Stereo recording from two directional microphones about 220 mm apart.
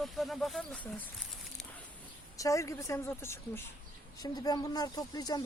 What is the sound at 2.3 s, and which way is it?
Speech, 15° left (ahead or behind).